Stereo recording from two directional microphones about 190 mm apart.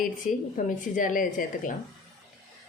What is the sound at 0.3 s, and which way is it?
A woman's voice, 45° left (ahead or behind).